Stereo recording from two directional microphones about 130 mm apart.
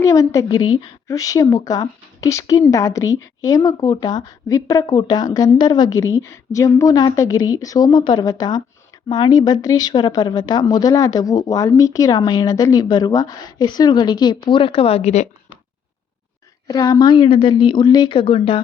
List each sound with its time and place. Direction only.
0.0 s a woman's voice: 25° left (ahead or behind); by 15.3 s 55° left (ahead or behind)
16.6 s a woman's voice: 30° left (ahead or behind); by 18.6 s 45° left (ahead or behind)